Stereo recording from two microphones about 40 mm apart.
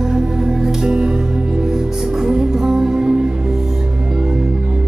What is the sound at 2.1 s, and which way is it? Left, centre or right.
Music, centre.